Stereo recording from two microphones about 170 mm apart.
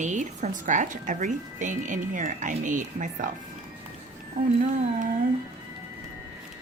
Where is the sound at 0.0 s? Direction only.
45° right (ahead or behind).